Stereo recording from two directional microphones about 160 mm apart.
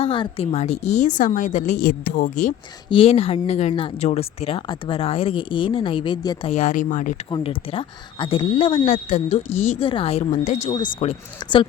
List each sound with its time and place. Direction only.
0.0 s a woman's voice: 35° left (ahead or behind); by 2.6 s 55° left (ahead or behind)
2.9 s speech: 35° left (ahead or behind)
6.6 s a woman's voice: 55° left (ahead or behind)
7.3 s speech: 30° left (ahead or behind)
9.0 s a woman's voice: 50° left (ahead or behind)
10.8 s speech: 30° left (ahead or behind)